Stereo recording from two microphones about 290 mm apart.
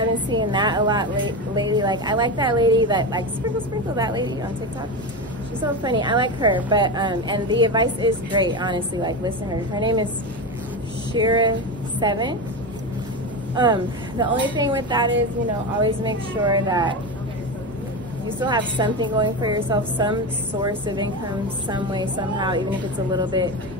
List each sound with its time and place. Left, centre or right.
0.3 s a woman's voice: centre
5.6 s a woman's voice: centre
11.1 s a woman's voice: centre
13.6 s a woman's voice: centre
18.4 s a woman's voice: centre
23.1 s a woman's voice: centre